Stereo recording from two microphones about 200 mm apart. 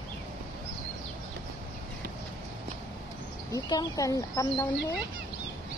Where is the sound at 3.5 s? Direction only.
20° left (ahead or behind).